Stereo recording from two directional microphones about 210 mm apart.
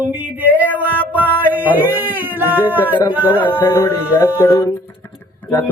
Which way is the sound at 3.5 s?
10° left (ahead or behind).